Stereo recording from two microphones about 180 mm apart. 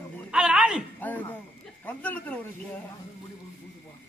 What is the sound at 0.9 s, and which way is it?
Speech, 10° left (ahead or behind).